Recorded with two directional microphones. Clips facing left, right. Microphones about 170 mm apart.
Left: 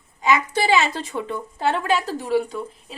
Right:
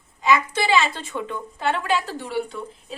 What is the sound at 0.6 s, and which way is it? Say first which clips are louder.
A woman's voice: left 1 dB; 40° left (ahead or behind).